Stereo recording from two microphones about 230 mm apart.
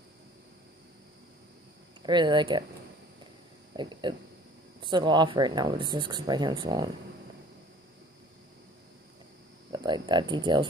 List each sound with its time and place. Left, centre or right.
2.0 s speech: centre
3.7 s speech: centre
9.7 s speech: centre